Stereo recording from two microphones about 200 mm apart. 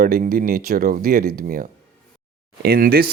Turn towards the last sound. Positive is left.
turn(degrees=-50)  # may be behind; listen again after turning